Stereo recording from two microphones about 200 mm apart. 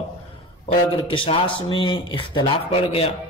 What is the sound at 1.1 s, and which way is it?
A man's voice, 25° left (ahead or behind).